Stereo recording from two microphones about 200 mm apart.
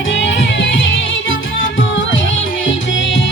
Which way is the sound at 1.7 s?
70° left (ahead or behind).